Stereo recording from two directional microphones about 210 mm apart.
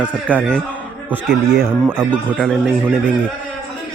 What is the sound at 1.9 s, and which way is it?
Speech, 5° right (ahead or behind).